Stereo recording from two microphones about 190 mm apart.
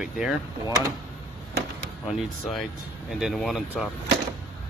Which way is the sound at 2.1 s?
Centre (ahead or behind).